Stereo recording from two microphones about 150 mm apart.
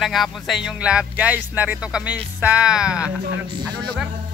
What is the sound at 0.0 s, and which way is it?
Speech, centre (ahead or behind).